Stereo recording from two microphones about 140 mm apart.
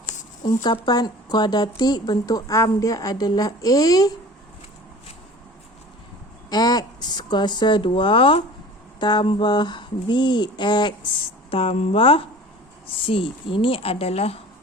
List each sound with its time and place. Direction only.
0.4 s a woman's voice: 30° left (ahead or behind)
6.5 s speech: 30° left (ahead or behind)
11.5 s speech: 45° left (ahead or behind)